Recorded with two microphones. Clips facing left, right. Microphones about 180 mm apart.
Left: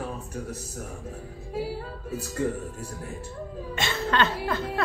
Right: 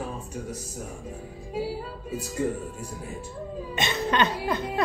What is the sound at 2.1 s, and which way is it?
A man's voice, 15° right (ahead or behind).